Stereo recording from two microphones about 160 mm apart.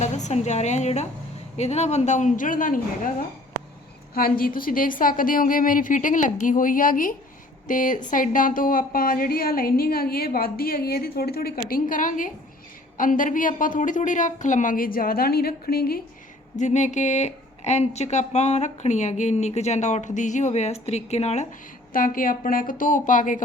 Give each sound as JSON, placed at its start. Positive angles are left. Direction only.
{"t": 0.0, "sound": "a woman's voice", "side_deg": 45}
{"t": 11.7, "sound": "a woman's voice", "side_deg": 55}
{"t": 16.6, "sound": "speech", "side_deg": 50}
{"t": 21.9, "sound": "a woman's voice", "side_deg": 60}